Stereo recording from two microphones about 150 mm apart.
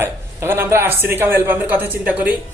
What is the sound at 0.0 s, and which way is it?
Speech, 15° right (ahead or behind).